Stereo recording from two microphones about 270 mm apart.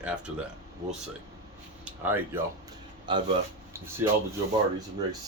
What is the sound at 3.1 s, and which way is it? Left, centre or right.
Speech, centre.